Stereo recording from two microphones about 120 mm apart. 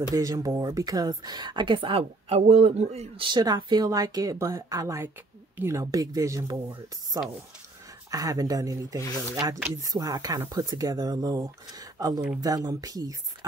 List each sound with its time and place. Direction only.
0.1 s speech: 30° right (ahead or behind); by 3.3 s 65° right (ahead or behind)
3.3 s speech: 35° right (ahead or behind)